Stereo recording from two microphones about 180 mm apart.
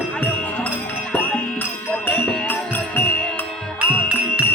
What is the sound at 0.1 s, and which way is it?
Music, 10° left (ahead or behind).